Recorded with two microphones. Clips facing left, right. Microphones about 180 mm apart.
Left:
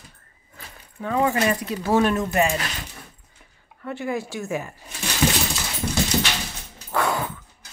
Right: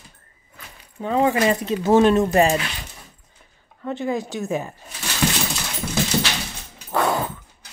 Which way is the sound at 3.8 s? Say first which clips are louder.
Right 3 dB; 20° right (ahead or behind).